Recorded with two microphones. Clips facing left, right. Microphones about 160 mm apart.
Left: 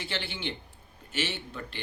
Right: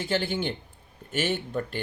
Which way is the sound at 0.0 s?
45° right (ahead or behind).